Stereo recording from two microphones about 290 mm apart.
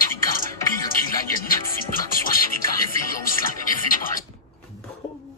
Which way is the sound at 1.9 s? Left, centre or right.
Left.